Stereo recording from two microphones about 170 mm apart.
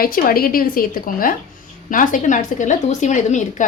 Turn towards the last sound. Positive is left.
turn(degrees=45)  # may be behind; listen again after turning